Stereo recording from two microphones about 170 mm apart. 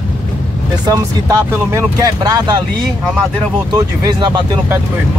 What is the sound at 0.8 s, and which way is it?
Speech, 20° right (ahead or behind).